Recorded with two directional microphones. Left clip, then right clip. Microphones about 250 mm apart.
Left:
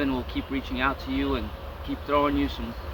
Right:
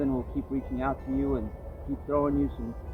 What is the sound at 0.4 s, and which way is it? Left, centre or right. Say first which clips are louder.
Speech: left 2 dB; centre.